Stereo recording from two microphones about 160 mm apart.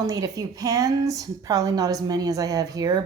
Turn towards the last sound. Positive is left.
turn(degrees=-25)  # may be behind; listen again after turning